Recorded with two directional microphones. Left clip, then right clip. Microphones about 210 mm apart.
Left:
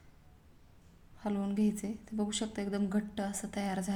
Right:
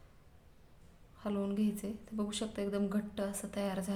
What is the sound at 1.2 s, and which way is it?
A woman's voice, 5° left (ahead or behind).